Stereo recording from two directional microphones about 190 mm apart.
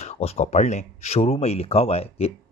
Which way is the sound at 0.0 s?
35° left (ahead or behind).